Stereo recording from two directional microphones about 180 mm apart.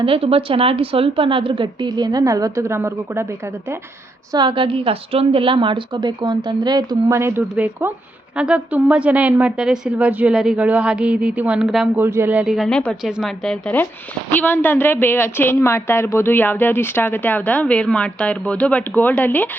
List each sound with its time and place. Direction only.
0.0 s a woman's voice: 30° right (ahead or behind); by 3.8 s 15° right (ahead or behind)
4.3 s a woman's voice: 25° right (ahead or behind); by 19.5 s 10° left (ahead or behind)